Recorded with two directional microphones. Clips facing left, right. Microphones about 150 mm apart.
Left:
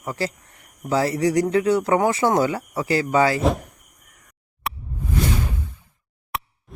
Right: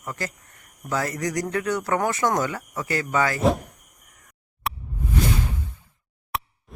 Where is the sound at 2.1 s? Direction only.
30° left (ahead or behind).